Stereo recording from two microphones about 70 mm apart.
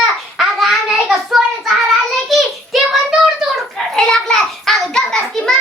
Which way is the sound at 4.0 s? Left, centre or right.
Centre.